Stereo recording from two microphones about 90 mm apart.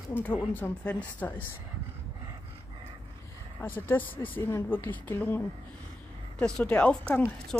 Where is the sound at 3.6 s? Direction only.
20° left (ahead or behind).